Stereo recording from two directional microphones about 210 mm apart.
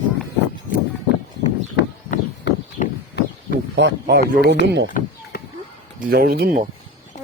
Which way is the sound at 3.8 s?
55° right (ahead or behind).